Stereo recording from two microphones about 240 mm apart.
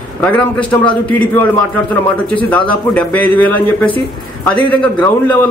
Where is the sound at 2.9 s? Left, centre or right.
Centre.